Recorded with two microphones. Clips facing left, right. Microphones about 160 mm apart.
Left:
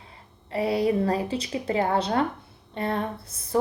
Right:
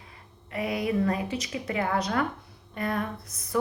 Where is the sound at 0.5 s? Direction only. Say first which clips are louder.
Left 4 dB; 30° left (ahead or behind).